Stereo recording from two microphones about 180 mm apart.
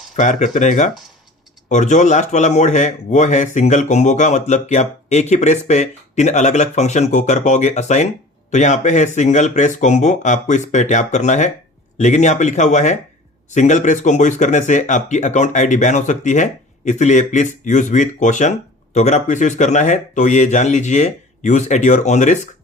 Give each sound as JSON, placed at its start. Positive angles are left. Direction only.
{"t": 0.2, "sound": "a man's voice", "side_deg": 40}